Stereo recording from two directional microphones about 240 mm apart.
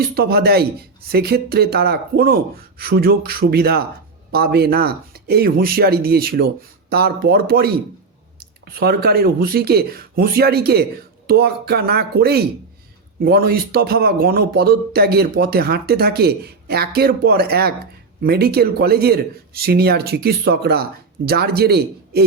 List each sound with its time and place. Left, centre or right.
0.1 s speech: right